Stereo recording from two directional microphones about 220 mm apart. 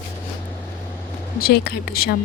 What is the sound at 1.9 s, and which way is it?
Speech, 45° left (ahead or behind).